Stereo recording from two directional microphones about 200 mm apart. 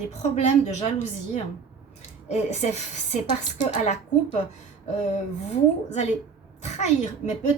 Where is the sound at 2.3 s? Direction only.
35° left (ahead or behind).